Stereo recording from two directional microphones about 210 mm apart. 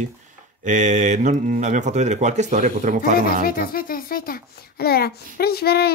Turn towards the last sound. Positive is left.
turn(degrees=50)  # may be behind; listen again after turning